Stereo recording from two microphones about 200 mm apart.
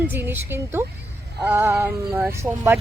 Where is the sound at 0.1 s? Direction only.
10° right (ahead or behind).